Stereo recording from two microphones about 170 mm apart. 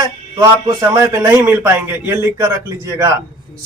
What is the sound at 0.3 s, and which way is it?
A man's voice, 20° right (ahead or behind).